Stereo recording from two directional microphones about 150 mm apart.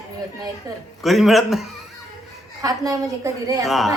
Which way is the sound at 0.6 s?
25° right (ahead or behind).